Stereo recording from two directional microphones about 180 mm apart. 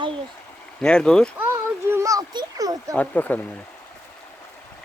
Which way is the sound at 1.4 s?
10° right (ahead or behind).